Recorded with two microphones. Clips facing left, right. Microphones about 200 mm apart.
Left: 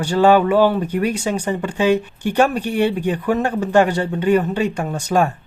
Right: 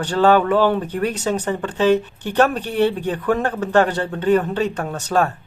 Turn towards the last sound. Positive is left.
turn(degrees=10)  # may be behind; listen again after turning